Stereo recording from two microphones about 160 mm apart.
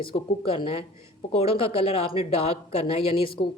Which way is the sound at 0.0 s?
35° left (ahead or behind).